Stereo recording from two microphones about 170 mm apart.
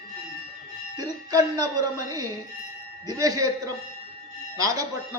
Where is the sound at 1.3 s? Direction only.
20° right (ahead or behind).